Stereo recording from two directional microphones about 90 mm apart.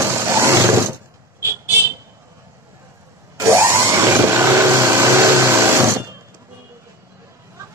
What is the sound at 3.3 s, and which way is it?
Vehicle, 30° right (ahead or behind).